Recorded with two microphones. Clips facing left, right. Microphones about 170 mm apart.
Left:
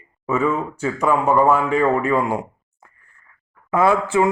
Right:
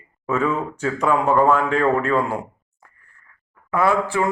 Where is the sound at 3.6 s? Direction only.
20° left (ahead or behind).